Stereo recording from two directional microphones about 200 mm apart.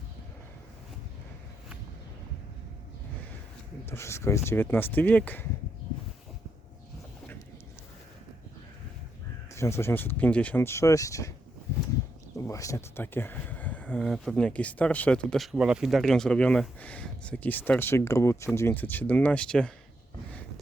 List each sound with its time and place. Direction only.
3.8 s speech: 10° left (ahead or behind)
9.6 s speech: 15° left (ahead or behind)
12.5 s speech: 15° left (ahead or behind)